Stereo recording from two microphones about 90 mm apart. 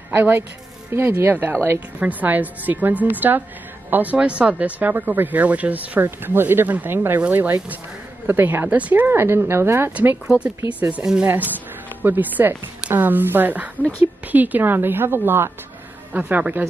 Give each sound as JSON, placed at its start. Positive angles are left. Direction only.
{"t": 0.1, "sound": "speech", "side_deg": -20}
{"t": 2.0, "sound": "speech", "side_deg": -15}
{"t": 10.2, "sound": "speech", "side_deg": -10}